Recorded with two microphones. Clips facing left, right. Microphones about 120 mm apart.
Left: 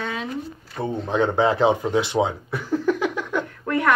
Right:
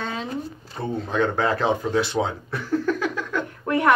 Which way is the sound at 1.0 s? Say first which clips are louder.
Left 3 dB; 20° left (ahead or behind).